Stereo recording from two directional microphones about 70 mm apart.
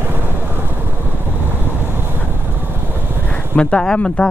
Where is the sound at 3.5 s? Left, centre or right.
Centre.